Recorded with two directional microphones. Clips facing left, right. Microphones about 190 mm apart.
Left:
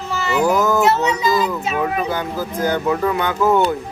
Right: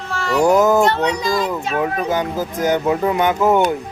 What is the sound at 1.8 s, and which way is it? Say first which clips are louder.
Speech: right 3 dB; 20° right (ahead or behind).